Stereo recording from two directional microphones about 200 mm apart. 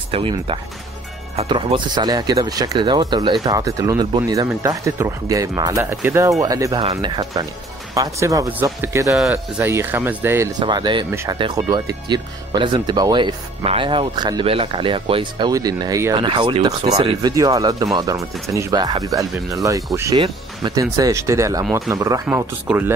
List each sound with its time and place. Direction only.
0.1 s speech: 25° right (ahead or behind); by 10.5 s 10° right (ahead or behind)
10.6 s speech: 20° right (ahead or behind)
11.1 s speech: 10° right (ahead or behind)